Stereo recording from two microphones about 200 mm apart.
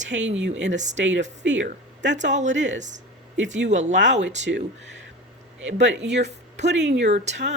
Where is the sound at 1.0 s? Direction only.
70° right (ahead or behind).